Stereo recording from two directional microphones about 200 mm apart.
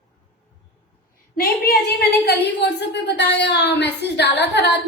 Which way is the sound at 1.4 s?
50° left (ahead or behind).